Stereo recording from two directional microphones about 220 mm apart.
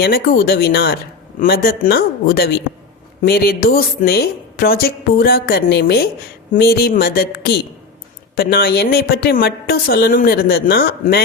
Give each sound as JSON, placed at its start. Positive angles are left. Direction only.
{"t": 0.0, "sound": "a woman's voice", "side_deg": 45}